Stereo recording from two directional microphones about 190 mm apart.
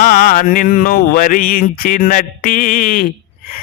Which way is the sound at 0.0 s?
45° left (ahead or behind).